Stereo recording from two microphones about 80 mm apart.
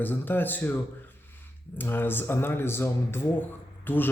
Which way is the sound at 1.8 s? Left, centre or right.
Left.